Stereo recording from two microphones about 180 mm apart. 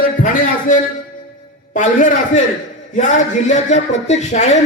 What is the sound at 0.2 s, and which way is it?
Speech, 45° left (ahead or behind).